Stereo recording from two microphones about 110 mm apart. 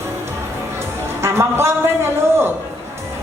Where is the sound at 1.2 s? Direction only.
25° right (ahead or behind).